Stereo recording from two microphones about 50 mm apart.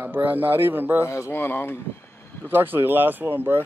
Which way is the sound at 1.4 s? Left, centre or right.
Left.